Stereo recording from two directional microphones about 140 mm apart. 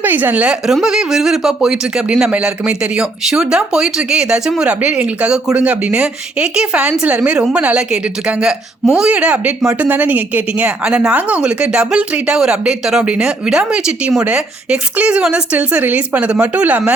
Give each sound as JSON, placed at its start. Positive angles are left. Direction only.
{"t": 0.0, "sound": "speech", "side_deg": -15}